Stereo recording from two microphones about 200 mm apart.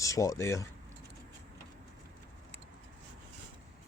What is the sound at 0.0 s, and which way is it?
Speech, 15° left (ahead or behind).